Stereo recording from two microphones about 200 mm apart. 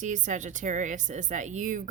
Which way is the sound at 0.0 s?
40° right (ahead or behind).